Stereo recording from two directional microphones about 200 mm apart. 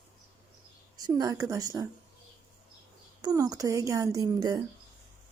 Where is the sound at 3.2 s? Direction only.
20° right (ahead or behind).